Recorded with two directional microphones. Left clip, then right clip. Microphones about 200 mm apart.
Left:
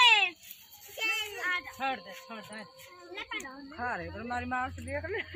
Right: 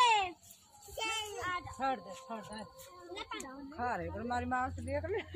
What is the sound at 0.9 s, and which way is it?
Speech, 15° right (ahead or behind).